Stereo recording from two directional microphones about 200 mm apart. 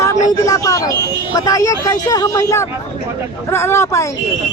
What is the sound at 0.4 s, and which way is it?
Speech, 15° left (ahead or behind).